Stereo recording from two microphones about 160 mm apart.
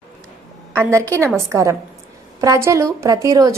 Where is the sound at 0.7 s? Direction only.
15° right (ahead or behind).